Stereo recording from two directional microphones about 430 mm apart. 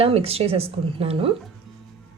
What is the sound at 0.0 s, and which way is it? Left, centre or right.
Speech, centre.